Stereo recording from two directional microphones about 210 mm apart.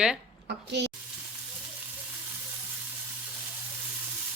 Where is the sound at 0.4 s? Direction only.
55° right (ahead or behind).